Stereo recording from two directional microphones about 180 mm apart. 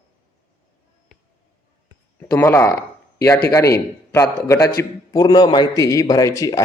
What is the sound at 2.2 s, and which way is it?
A man's voice, 10° left (ahead or behind).